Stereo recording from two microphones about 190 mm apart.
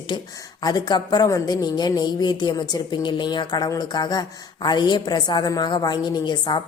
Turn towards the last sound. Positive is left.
turn(degrees=25)  # may be behind; listen again after turning